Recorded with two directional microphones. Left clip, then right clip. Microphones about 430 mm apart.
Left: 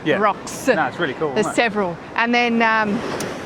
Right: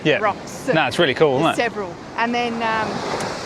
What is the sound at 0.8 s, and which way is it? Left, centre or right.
Speech, right.